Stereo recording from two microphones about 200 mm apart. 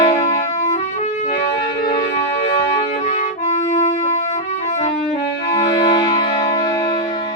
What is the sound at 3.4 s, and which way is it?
Music, 35° left (ahead or behind).